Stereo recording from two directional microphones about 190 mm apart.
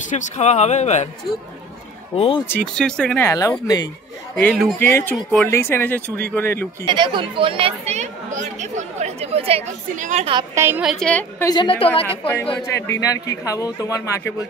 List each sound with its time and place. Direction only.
0.1 s speech: 35° left (ahead or behind)
2.1 s speech: 30° left (ahead or behind)
2.4 s speech: 5° left (ahead or behind)
4.4 s a woman's voice: 5° left (ahead or behind)
5.5 s speech: 10° left (ahead or behind)
6.9 s speech: 25° right (ahead or behind)
10.5 s a woman's voice: 10° right (ahead or behind); by 11.4 s 5° left (ahead or behind)
11.4 s a woman's voice: 20° left (ahead or behind)